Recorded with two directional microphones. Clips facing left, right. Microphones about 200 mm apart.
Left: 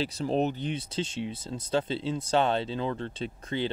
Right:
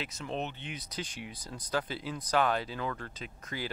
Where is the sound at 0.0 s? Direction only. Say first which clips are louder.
Left 9 dB; 35° left (ahead or behind).